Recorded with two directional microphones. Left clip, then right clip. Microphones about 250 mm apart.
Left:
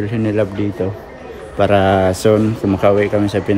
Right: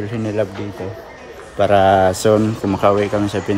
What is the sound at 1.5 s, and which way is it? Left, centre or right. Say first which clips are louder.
A man's voice: right 1 dB; centre.